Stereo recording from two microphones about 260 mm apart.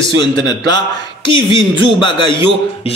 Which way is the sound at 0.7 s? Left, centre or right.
Centre.